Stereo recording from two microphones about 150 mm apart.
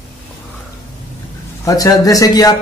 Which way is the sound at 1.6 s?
25° left (ahead or behind).